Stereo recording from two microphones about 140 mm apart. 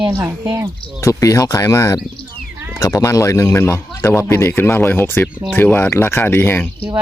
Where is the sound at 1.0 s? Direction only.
25° left (ahead or behind).